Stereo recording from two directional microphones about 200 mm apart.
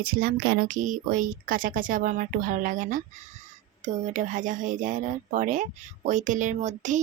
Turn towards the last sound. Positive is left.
turn(degrees=-35)  # may be behind; listen again after turning